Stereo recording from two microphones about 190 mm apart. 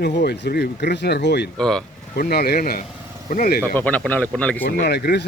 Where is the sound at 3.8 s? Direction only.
10° left (ahead or behind).